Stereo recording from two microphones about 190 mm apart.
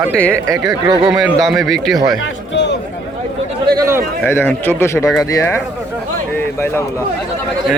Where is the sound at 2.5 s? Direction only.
65° left (ahead or behind).